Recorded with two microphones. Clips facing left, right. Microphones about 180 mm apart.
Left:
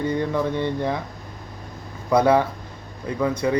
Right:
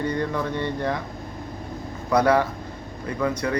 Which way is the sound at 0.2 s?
15° left (ahead or behind).